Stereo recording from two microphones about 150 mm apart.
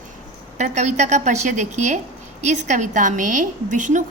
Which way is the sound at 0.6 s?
50° right (ahead or behind).